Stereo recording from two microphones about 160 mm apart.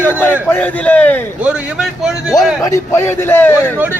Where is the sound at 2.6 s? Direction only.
15° left (ahead or behind).